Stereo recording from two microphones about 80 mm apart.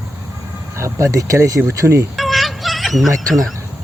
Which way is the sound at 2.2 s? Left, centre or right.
Centre.